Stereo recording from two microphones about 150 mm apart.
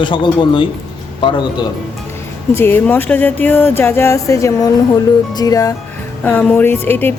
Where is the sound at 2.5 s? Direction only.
15° left (ahead or behind).